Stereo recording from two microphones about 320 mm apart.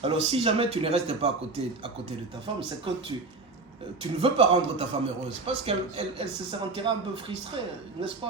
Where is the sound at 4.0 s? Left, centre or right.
Centre.